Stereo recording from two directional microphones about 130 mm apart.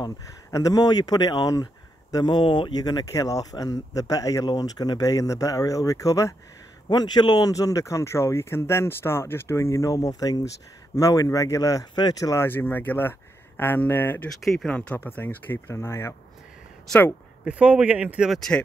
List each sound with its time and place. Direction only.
0.0 s speech: 25° left (ahead or behind)
14.4 s speech: centre (ahead or behind); by 16.2 s 20° left (ahead or behind)
17.5 s speech: 10° right (ahead or behind)